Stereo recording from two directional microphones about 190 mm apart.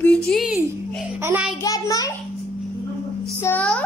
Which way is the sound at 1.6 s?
20° left (ahead or behind).